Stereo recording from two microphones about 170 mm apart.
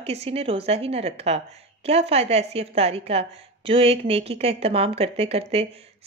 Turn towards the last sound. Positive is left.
turn(degrees=-35)  # may be behind; listen again after turning